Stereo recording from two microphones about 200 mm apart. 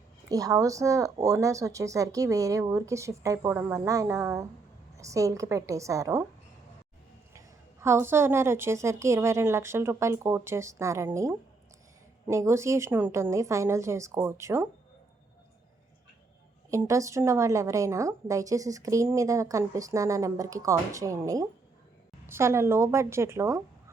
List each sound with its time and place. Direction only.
0.3 s a woman's voice: 15° right (ahead or behind)
7.3 s a woman's voice: 15° right (ahead or behind)
16.6 s a woman's voice: 15° right (ahead or behind)